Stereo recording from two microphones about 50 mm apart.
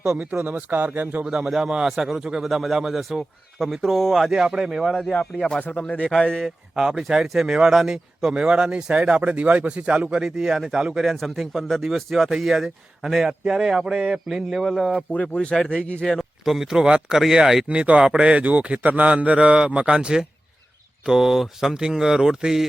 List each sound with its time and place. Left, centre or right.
0.4 s speech: right
1.2 s speech: centre
4.2 s speech: centre
5.1 s speech: centre
5.5 s speech: left
5.8 s a man's voice: left
6.4 s speech: centre; by 10.1 s right
10.1 s speech: centre
15.1 s speech: left
15.4 s speech: centre
15.9 s a man's voice: left
16.4 s speech: centre
17.7 s a man's voice: right